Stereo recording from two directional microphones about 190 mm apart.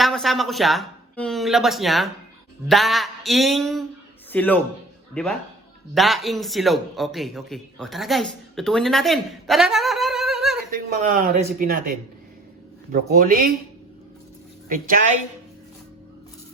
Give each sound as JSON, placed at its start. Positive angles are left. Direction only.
{"t": 0.0, "sound": "a man's voice", "side_deg": 0}
{"t": 10.7, "sound": "speech", "side_deg": -50}
{"t": 12.9, "sound": "speech", "side_deg": -45}
{"t": 14.7, "sound": "speech", "side_deg": -45}